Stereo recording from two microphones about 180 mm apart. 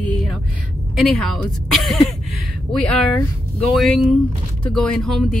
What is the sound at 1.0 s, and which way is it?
Speech, centre (ahead or behind).